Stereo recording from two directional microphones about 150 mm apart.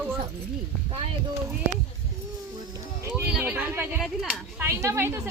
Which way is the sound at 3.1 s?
10° right (ahead or behind).